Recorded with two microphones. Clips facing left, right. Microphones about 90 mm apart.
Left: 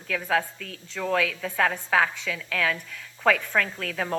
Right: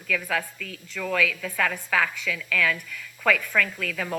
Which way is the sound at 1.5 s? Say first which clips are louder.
Left 6 dB; 30° left (ahead or behind).